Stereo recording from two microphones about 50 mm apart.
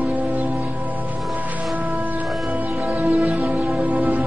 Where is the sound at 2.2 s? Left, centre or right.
Centre.